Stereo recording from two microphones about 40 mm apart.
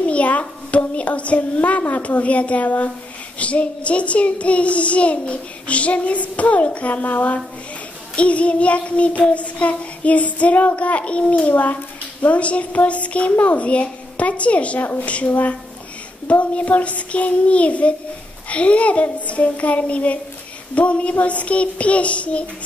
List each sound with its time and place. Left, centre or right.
0.0 s child singing: left
15.0 s speech: left
16.3 s child singing: left